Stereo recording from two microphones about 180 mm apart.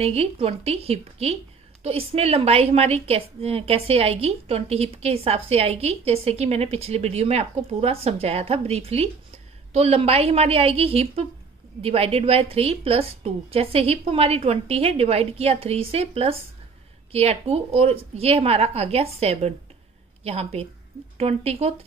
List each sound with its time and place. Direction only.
0.0 s a woman's voice: 35° right (ahead or behind)